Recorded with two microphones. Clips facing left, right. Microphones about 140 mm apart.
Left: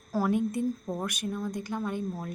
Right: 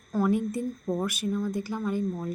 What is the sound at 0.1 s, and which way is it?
A woman's voice, centre (ahead or behind).